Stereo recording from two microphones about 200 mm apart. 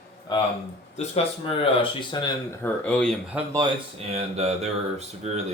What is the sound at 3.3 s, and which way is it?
Speech, 10° right (ahead or behind).